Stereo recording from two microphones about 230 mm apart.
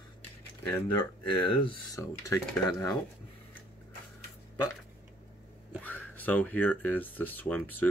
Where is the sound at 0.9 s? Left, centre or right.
Left.